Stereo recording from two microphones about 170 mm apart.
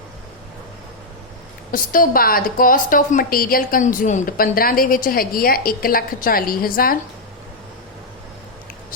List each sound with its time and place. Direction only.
1.7 s a woman's voice: 55° left (ahead or behind)